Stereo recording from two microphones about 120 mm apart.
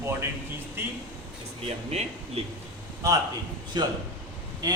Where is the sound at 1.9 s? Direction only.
60° right (ahead or behind).